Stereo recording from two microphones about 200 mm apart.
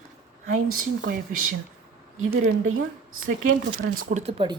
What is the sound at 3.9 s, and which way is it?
Speech, 35° right (ahead or behind).